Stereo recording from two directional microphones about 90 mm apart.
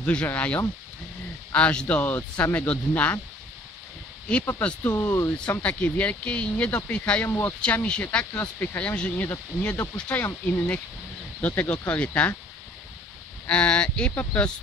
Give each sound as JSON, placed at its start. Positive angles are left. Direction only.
{"t": 0.0, "sound": "speech", "side_deg": 15}
{"t": 4.8, "sound": "speech", "side_deg": 30}
{"t": 5.5, "sound": "speech", "side_deg": 15}
{"t": 8.3, "sound": "speech", "side_deg": 25}
{"t": 13.5, "sound": "speech", "side_deg": 10}